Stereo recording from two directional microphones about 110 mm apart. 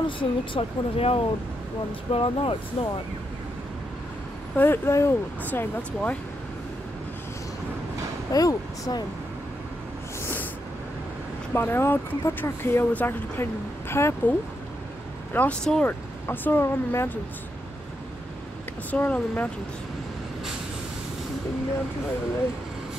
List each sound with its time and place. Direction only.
0.0 s speech: 50° left (ahead or behind)
4.6 s speech: 20° left (ahead or behind)
8.3 s speech: 30° left (ahead or behind)
11.5 s speech: 20° left (ahead or behind)
15.3 s speech: 10° left (ahead or behind)
16.3 s speech: 20° left (ahead or behind)
18.9 s speech: 15° left (ahead or behind)